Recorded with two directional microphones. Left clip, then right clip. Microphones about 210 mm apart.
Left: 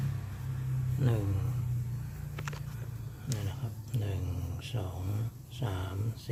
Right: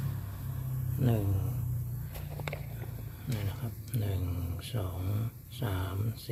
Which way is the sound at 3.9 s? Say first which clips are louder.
Right 1 dB; 5° right (ahead or behind).